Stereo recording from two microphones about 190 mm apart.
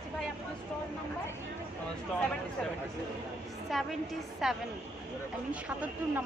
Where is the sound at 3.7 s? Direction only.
Centre (ahead or behind).